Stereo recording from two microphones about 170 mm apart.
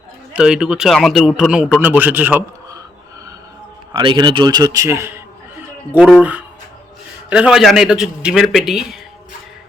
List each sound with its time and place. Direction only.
0.3 s a man's voice: 5° right (ahead or behind)
3.9 s a man's voice: 30° right (ahead or behind)
6.0 s a man's voice: 5° right (ahead or behind)